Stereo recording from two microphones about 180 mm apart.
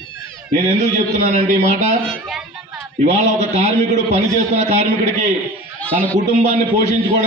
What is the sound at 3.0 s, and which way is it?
A man's voice, 40° right (ahead or behind).